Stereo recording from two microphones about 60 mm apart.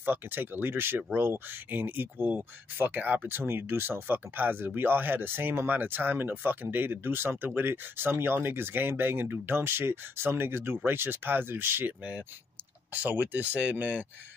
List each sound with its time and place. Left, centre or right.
0.0 s speech: right
12.0 s speech: right